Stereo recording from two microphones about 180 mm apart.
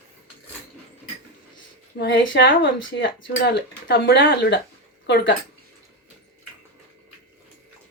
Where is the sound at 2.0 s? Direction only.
80° left.